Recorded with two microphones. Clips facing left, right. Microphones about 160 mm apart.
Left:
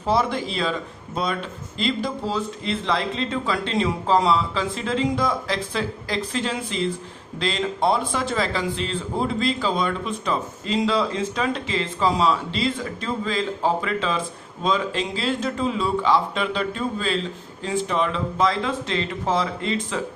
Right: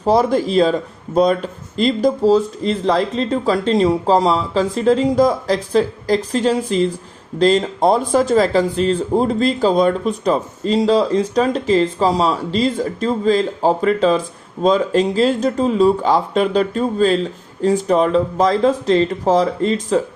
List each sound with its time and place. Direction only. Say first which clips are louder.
0.0 s speech: right 7 dB; 40° right (ahead or behind)